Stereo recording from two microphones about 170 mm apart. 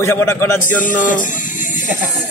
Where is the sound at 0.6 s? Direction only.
50° left (ahead or behind).